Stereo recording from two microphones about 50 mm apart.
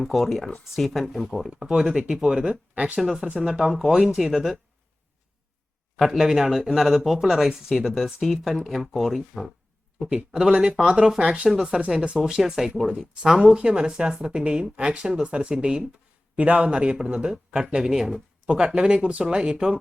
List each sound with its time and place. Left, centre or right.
0.0 s speech: centre
1.5 s speech: centre
3.0 s speech: centre
6.0 s speech: centre
7.9 s a man's voice: centre